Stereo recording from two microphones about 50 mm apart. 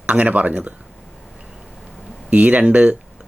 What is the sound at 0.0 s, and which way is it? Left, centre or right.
Speech, right.